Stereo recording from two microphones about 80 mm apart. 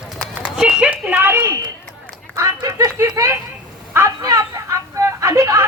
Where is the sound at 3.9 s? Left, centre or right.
Right.